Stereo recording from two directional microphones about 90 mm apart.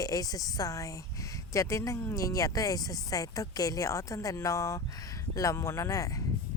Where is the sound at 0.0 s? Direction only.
45° left (ahead or behind).